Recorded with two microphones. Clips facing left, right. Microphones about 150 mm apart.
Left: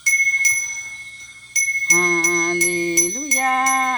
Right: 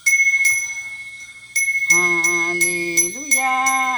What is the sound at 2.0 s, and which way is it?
Speech, 5° right (ahead or behind).